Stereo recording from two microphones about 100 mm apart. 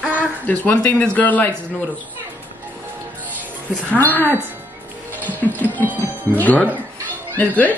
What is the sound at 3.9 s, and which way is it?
Speech, 20° left (ahead or behind).